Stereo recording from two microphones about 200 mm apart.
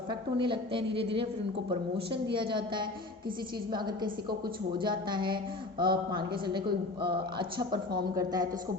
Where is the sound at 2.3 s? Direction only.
25° right (ahead or behind).